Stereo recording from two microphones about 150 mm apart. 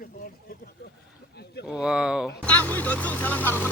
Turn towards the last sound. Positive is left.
turn(degrees=10)  # may be behind; listen again after turning